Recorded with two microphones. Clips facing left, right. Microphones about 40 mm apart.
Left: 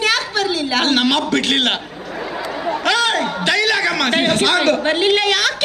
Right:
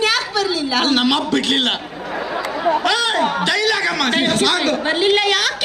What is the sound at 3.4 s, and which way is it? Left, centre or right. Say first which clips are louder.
A man's voice: left 1 dB; left.